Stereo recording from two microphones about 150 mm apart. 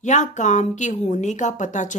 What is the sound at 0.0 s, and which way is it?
A woman's voice, 55° left (ahead or behind).